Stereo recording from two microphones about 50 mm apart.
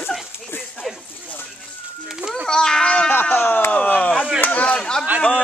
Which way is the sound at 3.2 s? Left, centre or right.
Left.